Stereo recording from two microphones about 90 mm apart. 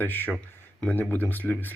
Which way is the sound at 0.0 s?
20° left (ahead or behind).